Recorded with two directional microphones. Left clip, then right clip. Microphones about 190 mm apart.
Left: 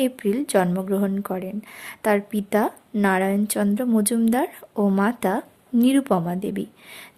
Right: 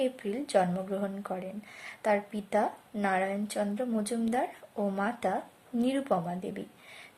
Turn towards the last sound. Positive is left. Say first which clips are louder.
# left 7 dB
turn(degrees=40)  # may be behind; listen again after turning